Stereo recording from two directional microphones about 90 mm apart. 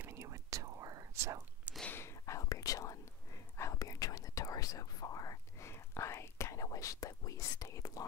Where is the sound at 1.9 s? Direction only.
30° left (ahead or behind).